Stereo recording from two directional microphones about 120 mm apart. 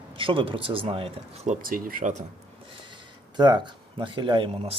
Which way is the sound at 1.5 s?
85° right.